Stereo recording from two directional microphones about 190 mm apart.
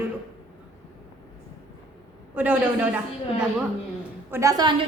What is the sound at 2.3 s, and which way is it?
Speech, 5° right (ahead or behind).